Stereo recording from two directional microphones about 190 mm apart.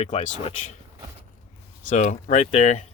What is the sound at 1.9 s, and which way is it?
Speech, 40° left (ahead or behind).